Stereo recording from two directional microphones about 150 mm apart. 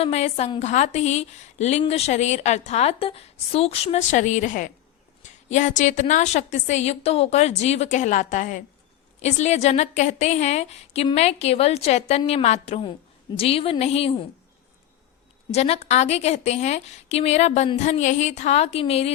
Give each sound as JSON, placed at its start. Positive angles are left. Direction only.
{"t": 0.0, "sound": "a woman's voice", "side_deg": 45}
{"t": 15.5, "sound": "a woman's voice", "side_deg": 45}